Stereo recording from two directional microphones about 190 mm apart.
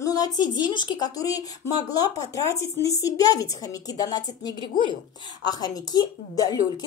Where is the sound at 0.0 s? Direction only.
20° left (ahead or behind).